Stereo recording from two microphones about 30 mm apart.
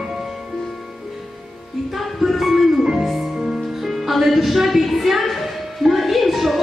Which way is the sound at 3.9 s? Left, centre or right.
Centre.